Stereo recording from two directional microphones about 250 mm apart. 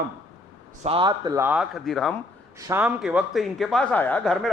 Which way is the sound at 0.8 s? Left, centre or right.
Centre.